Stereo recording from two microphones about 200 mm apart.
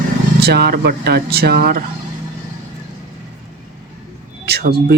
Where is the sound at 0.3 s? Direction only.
55° right (ahead or behind).